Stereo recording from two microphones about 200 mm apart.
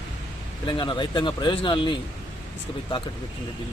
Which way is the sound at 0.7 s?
25° left (ahead or behind).